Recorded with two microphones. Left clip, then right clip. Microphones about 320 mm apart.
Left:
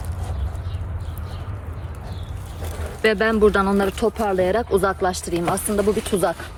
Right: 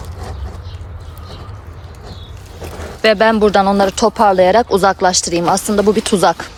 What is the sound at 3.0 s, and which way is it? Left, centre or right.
Speech, centre.